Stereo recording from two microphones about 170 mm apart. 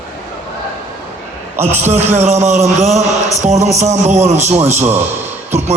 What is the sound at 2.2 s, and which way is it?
A man's voice, 45° right (ahead or behind).